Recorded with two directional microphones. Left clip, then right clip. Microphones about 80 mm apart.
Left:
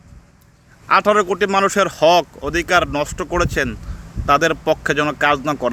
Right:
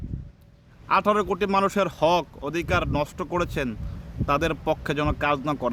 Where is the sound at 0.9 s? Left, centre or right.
Right.